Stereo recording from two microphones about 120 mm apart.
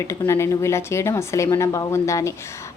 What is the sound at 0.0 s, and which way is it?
A woman's voice, 25° left (ahead or behind).